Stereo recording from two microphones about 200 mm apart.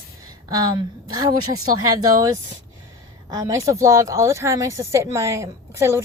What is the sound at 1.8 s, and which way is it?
A woman's voice, 20° right (ahead or behind).